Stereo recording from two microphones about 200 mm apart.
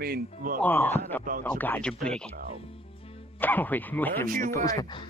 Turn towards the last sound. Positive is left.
turn(degrees=20)  # may be behind; listen again after turning